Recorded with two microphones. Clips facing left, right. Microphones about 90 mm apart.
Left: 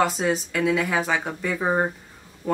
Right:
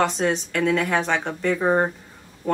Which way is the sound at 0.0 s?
5° left (ahead or behind).